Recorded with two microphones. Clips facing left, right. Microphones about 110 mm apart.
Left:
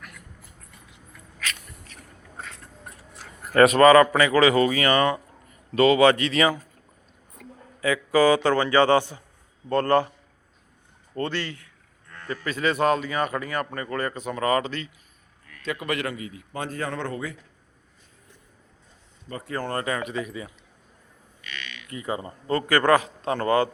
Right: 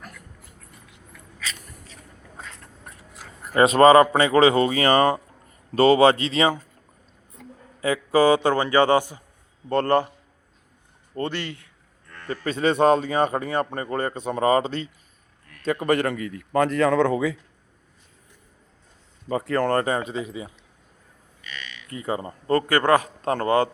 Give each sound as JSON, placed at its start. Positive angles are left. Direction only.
{"t": 3.5, "sound": "speech", "side_deg": -25}
{"t": 11.1, "sound": "speech", "side_deg": -20}
{"t": 12.3, "sound": "speech", "side_deg": -30}
{"t": 15.4, "sound": "a man's voice", "side_deg": -40}
{"t": 19.4, "sound": "speech", "side_deg": -75}
{"t": 19.8, "sound": "speech", "side_deg": -30}
{"t": 21.8, "sound": "speech", "side_deg": -35}
{"t": 22.7, "sound": "speech", "side_deg": -25}
{"t": 23.0, "sound": "a man's voice", "side_deg": -40}